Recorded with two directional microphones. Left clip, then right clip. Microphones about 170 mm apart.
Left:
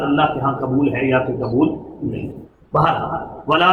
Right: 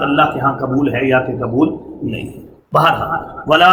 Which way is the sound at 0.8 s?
5° right (ahead or behind).